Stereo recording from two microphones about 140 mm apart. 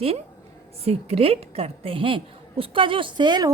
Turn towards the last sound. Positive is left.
turn(degrees=-30)  # may be behind; listen again after turning